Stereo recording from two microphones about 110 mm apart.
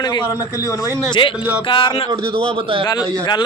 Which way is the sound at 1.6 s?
50° left (ahead or behind).